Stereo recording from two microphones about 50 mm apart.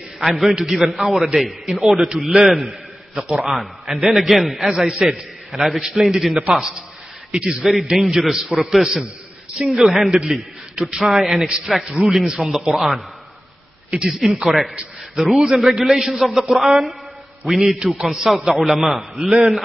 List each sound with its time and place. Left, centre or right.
0.2 s a man's voice: centre
3.2 s a man's voice: right
3.4 s a man's voice: centre
7.6 s a man's voice: centre
10.9 s a man's voice: centre
11.4 s a man's voice: centre
12.0 s a man's voice: centre
12.6 s a man's voice: centre
14.0 s a man's voice: centre